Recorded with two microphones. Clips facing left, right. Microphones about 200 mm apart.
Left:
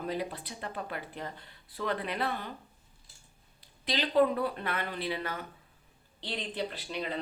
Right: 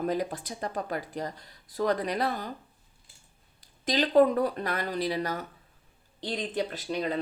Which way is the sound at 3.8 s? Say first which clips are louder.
Right 5 dB; 45° right (ahead or behind).